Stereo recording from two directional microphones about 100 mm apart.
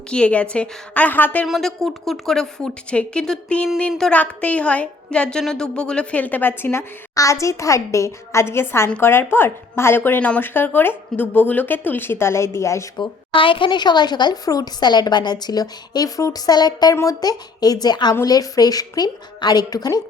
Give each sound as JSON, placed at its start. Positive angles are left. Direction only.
{"t": 0.1, "sound": "a woman's voice", "side_deg": 10}
{"t": 1.5, "sound": "a woman's voice", "side_deg": 0}
{"t": 13.0, "sound": "a woman's voice", "side_deg": 60}
{"t": 16.9, "sound": "a woman's voice", "side_deg": 35}